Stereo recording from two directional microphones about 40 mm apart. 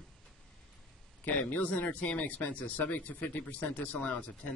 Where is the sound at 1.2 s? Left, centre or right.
Left.